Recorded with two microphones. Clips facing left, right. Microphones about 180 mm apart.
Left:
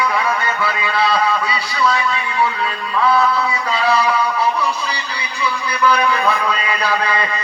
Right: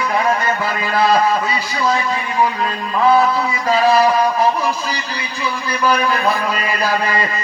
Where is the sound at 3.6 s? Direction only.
40° right (ahead or behind).